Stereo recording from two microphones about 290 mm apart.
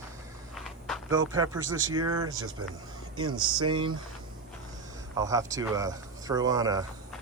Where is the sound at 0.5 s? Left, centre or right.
Centre.